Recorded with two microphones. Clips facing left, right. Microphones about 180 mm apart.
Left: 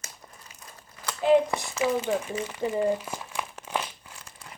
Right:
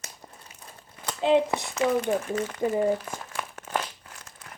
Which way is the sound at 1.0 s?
25° right (ahead or behind).